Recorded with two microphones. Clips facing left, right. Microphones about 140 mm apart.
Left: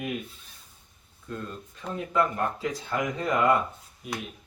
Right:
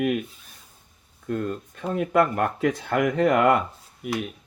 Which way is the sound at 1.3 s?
65° right (ahead or behind).